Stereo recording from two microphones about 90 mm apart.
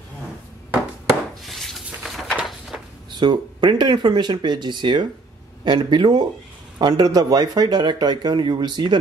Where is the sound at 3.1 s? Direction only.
55° right (ahead or behind).